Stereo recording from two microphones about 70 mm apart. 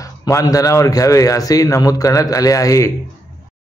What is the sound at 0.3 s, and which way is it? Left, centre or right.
A man's voice, left.